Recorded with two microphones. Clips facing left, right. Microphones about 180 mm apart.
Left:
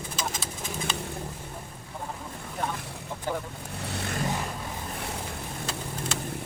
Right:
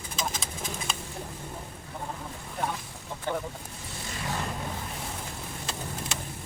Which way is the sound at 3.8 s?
65° left (ahead or behind).